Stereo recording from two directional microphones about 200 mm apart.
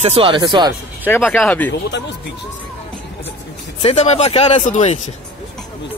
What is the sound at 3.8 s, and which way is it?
Speech, 35° left (ahead or behind).